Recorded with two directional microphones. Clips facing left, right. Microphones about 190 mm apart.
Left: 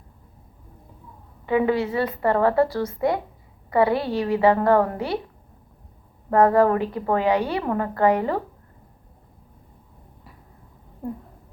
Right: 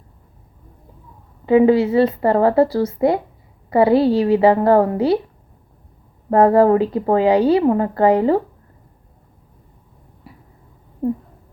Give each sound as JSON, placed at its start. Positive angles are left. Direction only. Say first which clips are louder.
{"t": 1.5, "sound": "a woman's voice", "louder": "right 8 dB", "side_deg": -25}
{"t": 6.3, "sound": "a woman's voice", "louder": "right 5 dB", "side_deg": -25}